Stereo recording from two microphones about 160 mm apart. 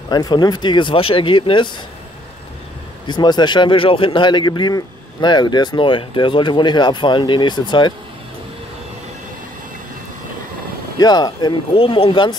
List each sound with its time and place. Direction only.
0.1 s speech: 25° left (ahead or behind)
3.1 s speech: 25° left (ahead or behind)
11.0 s speech: 25° left (ahead or behind)